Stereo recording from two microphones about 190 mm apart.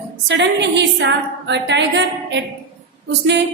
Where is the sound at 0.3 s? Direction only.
65° right (ahead or behind).